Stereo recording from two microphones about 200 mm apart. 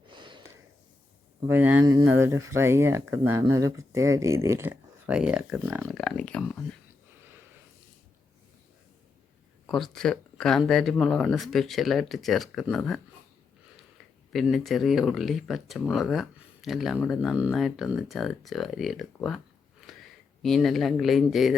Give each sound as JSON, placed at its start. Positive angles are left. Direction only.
{"t": 0.1, "sound": "a sound", "side_deg": -25}
{"t": 1.5, "sound": "speech", "side_deg": -10}
{"t": 6.0, "sound": "speech", "side_deg": 5}
{"t": 9.6, "sound": "speech", "side_deg": 0}
{"t": 14.3, "sound": "speech", "side_deg": 0}